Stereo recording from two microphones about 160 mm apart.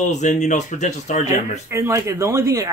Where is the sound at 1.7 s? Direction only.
15° right (ahead or behind).